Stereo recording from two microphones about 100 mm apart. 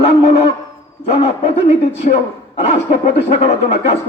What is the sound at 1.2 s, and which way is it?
Speech, 70° left (ahead or behind).